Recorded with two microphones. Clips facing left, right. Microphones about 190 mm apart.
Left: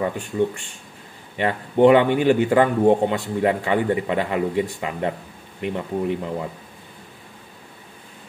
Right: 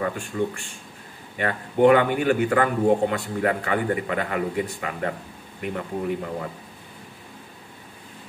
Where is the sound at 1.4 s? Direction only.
25° left (ahead or behind).